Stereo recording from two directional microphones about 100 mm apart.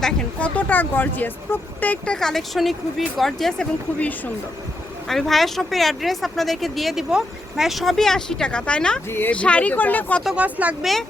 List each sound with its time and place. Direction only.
0.0 s speech: 10° left (ahead or behind)
2.1 s speech: 5° left (ahead or behind)
5.0 s speech: centre (ahead or behind)
9.0 s speech: 20° left (ahead or behind)
10.2 s speech: 15° right (ahead or behind)